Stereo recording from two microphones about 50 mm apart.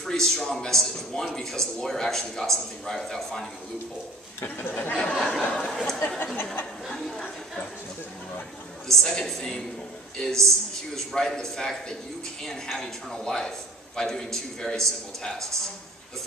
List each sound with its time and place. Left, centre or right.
0.0 s a man's voice: centre
4.4 s speech: left
5.1 s a man's voice: centre
5.4 s speech: centre
5.7 s speech: centre
5.9 s a sound: left
8.8 s a man's voice: centre